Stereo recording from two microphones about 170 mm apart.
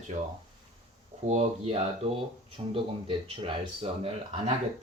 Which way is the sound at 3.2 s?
30° right (ahead or behind).